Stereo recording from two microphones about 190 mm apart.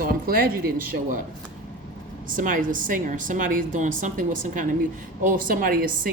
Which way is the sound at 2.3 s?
45° right (ahead or behind).